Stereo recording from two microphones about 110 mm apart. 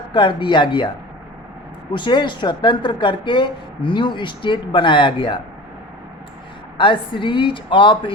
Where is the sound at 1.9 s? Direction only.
45° left (ahead or behind).